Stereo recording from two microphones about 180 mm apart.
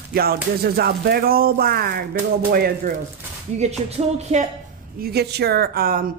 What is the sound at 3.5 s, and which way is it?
Speech, 40° right (ahead or behind).